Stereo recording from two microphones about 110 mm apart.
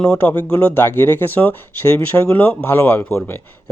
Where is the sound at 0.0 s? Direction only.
10° left (ahead or behind).